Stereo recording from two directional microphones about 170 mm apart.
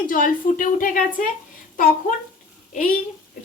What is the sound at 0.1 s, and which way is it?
A woman's voice, 55° left (ahead or behind).